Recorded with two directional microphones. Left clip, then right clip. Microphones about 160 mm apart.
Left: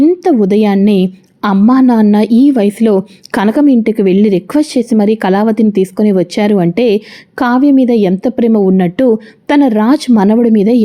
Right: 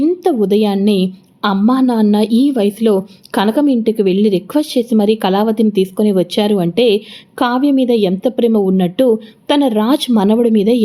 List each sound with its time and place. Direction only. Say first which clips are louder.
0.0 s a woman's voice: left 4 dB; 25° left (ahead or behind)